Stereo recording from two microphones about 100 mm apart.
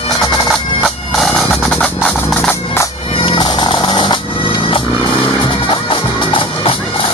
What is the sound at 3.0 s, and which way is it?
Music, 60° left (ahead or behind).